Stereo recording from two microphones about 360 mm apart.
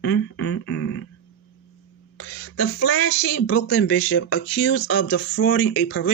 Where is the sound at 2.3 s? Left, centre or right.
Left.